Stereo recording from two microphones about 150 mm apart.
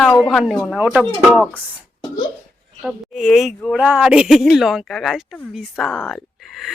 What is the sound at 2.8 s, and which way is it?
Speech, centre (ahead or behind).